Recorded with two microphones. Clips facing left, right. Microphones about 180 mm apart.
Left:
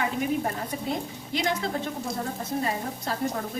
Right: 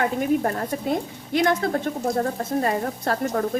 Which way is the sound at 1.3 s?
55° right (ahead or behind).